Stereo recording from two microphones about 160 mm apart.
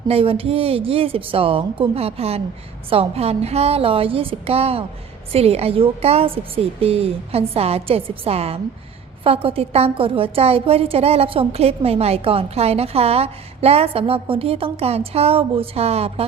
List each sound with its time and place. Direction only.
0.1 s a woman's voice: 35° right (ahead or behind)